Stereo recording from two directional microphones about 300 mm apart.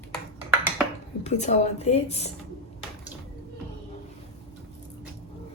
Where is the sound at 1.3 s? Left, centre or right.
Left.